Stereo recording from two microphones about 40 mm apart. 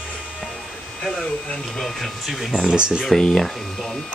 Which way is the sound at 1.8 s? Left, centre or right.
Centre.